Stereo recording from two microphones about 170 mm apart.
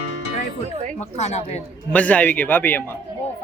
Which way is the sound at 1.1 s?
40° left (ahead or behind).